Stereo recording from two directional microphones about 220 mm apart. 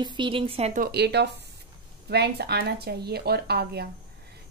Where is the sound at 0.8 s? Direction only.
45° right (ahead or behind).